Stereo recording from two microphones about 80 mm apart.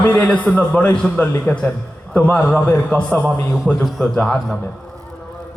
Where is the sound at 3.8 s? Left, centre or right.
Centre.